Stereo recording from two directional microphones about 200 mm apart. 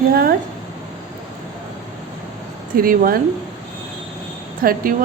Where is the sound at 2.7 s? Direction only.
45° right (ahead or behind).